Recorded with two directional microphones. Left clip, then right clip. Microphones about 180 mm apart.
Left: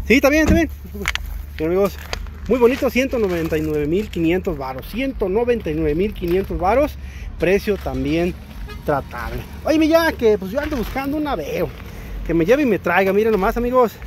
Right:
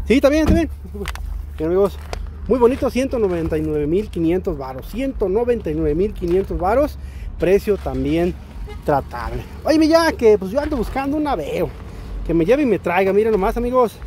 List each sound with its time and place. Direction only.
0.1 s speech: 10° right (ahead or behind)
4.2 s speech: centre (ahead or behind)